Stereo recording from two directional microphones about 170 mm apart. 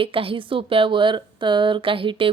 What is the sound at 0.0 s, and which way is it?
Speech, 30° right (ahead or behind).